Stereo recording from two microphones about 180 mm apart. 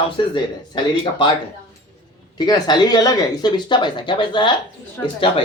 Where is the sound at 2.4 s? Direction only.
20° left (ahead or behind).